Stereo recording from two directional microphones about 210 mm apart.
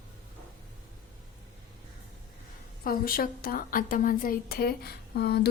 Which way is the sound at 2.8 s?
45° left (ahead or behind).